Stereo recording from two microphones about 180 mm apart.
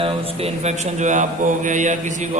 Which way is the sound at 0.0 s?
35° right (ahead or behind).